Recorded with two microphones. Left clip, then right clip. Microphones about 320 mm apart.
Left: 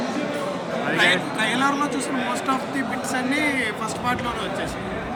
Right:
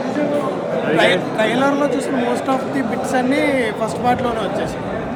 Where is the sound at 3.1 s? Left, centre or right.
Centre.